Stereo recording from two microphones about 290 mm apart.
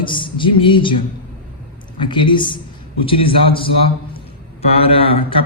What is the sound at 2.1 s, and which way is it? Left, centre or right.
A man's voice, centre.